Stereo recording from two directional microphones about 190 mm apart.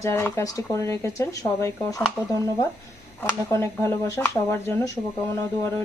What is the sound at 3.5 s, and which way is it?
Speech, 15° left (ahead or behind).